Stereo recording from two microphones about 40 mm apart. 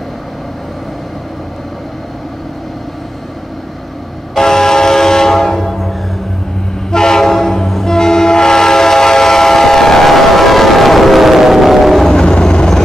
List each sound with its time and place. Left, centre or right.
4.4 s train: centre
12.1 s train: centre